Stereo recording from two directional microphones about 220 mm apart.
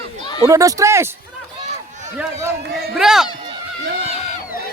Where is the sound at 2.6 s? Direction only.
45° right (ahead or behind).